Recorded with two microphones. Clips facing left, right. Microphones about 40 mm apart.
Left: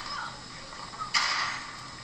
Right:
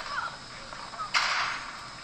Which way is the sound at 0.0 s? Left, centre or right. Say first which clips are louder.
Right 3 dB; centre.